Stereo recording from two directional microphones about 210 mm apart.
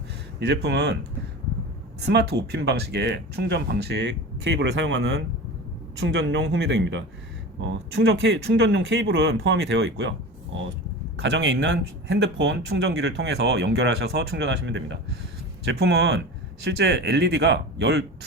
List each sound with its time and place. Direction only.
0.3 s speech: 55° right (ahead or behind)
2.0 s speech: 50° right (ahead or behind)
11.2 s speech: 60° right (ahead or behind)